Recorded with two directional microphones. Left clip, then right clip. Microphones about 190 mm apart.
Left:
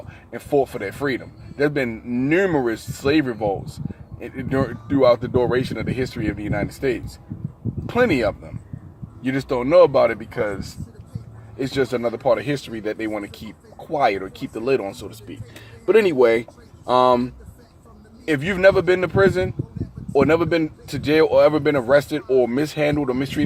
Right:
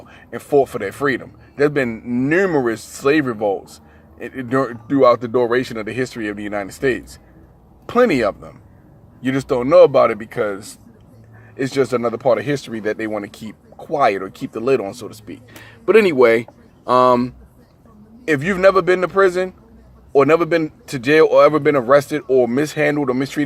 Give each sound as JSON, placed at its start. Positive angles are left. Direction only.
{"t": 0.3, "sound": "speech", "side_deg": -25}
{"t": 9.6, "sound": "speech", "side_deg": -25}
{"t": 11.5, "sound": "speech", "side_deg": -25}